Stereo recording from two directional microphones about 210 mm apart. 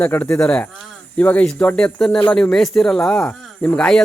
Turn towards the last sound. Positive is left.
turn(degrees=5)  # may be behind; listen again after turning